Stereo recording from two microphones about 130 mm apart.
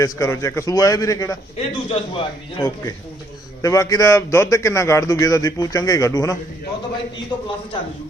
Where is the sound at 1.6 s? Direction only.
45° left (ahead or behind).